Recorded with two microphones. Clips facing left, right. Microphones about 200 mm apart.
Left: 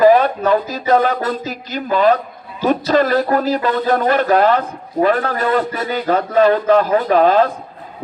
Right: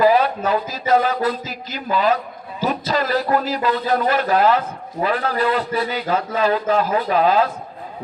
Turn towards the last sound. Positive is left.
turn(degrees=45)  # may be behind; listen again after turning